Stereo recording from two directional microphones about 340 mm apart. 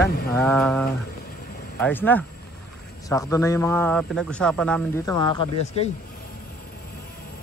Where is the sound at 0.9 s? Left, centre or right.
Left.